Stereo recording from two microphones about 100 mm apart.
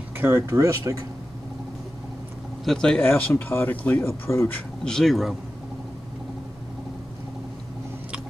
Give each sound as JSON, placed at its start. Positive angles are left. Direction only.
{"t": 0.2, "sound": "speech", "side_deg": -25}
{"t": 2.6, "sound": "speech", "side_deg": 5}
{"t": 4.3, "sound": "speech", "side_deg": 25}
{"t": 4.6, "sound": "speech", "side_deg": 5}